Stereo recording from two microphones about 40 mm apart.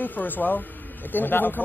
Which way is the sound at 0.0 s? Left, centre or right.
Left.